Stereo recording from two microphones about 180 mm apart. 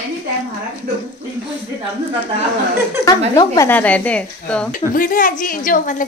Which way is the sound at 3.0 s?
20° right (ahead or behind).